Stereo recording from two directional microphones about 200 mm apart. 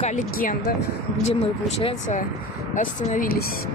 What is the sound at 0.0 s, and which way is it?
Speech, 40° left (ahead or behind).